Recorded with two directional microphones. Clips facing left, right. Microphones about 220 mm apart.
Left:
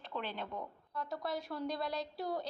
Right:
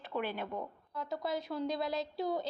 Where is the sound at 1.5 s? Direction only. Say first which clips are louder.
Right 5 dB; 10° right (ahead or behind).